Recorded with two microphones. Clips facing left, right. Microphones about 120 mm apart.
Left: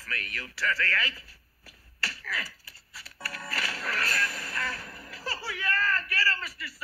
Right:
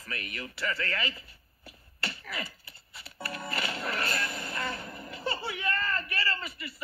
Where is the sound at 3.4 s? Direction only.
25° right (ahead or behind).